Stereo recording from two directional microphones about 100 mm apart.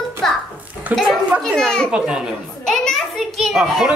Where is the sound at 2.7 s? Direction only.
5° left (ahead or behind).